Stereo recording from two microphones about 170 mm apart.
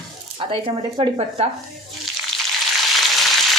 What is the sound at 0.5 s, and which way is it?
Speech, 35° right (ahead or behind).